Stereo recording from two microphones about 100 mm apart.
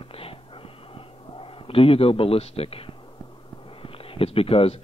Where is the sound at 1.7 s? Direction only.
70° left (ahead or behind).